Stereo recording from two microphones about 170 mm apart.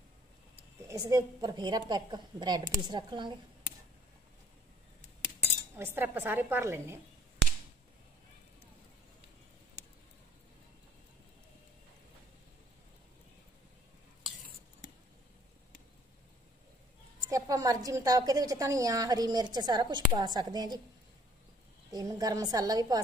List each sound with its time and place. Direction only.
0.8 s a woman's voice: 20° right (ahead or behind)
5.8 s a woman's voice: 10° right (ahead or behind)
17.3 s a woman's voice: 20° right (ahead or behind)
21.9 s a woman's voice: 20° right (ahead or behind)